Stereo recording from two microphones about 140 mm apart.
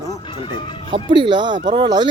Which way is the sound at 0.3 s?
35° left (ahead or behind).